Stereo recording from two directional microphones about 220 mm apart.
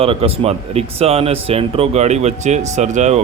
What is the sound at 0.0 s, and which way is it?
Speech, 25° right (ahead or behind).